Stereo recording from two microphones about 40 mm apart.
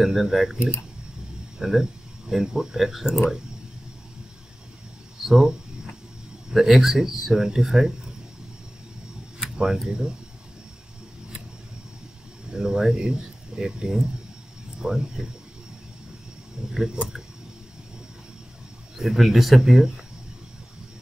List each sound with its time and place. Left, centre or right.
0.0 s speech: centre
1.6 s speech: centre
5.2 s speech: centre
9.8 s speech: centre
12.5 s speech: centre
16.7 s speech: centre
18.9 s speech: centre